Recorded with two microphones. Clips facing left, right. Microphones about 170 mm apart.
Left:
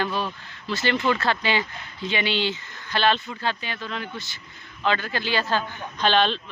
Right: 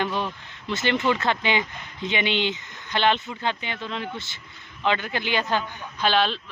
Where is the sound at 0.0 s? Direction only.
20° right (ahead or behind).